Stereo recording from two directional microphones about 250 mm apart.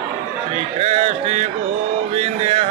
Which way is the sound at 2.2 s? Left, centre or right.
Right.